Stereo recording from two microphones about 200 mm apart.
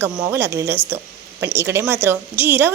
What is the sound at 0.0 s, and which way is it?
Speech, 15° right (ahead or behind).